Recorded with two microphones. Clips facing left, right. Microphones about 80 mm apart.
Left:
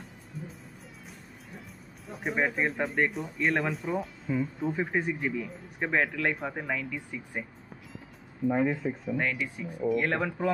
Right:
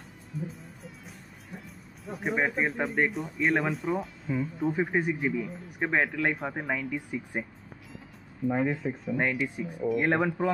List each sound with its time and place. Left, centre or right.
0.3 s speech: centre
2.0 s speech: centre
6.7 s speech: centre
8.5 s speech: centre
9.4 s speech: centre